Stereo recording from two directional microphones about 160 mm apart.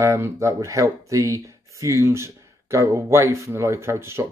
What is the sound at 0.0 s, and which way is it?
Speech, 20° right (ahead or behind).